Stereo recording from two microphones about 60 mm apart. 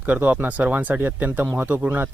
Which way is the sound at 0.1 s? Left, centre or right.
Right.